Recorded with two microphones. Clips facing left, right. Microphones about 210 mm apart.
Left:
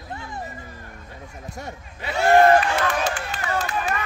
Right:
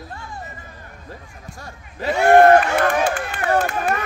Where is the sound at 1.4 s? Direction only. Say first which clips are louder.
Left 4 dB; 20° left (ahead or behind).